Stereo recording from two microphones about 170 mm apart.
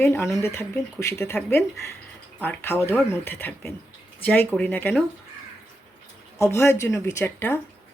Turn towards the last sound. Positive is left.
turn(degrees=15)  # may be behind; listen again after turning